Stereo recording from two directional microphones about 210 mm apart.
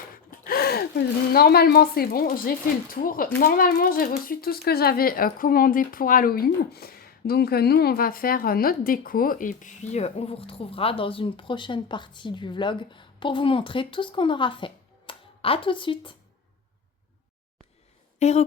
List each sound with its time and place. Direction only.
0.3 s speech: 45° left (ahead or behind); by 16.1 s 25° left (ahead or behind)
18.2 s speech: 30° left (ahead or behind)